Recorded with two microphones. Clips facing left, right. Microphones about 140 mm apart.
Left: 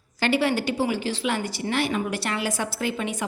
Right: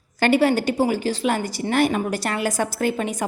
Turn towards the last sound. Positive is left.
turn(degrees=-40)  # may be behind; listen again after turning